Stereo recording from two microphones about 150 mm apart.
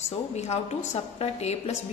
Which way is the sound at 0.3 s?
45° left (ahead or behind).